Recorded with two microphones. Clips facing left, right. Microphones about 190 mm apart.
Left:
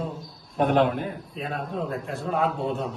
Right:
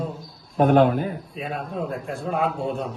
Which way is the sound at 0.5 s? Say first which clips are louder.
Right 4 dB; 40° right (ahead or behind).